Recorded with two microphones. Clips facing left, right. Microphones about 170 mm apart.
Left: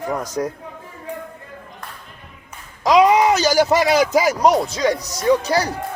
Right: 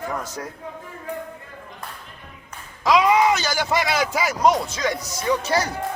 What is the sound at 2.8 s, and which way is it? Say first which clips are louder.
Speech: left 4 dB; 35° left (ahead or behind).